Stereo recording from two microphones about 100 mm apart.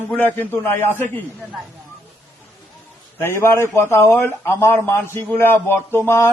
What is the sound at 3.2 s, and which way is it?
A man's voice, 25° left (ahead or behind).